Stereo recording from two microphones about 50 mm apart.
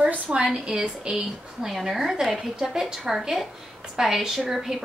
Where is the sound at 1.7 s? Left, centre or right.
Centre.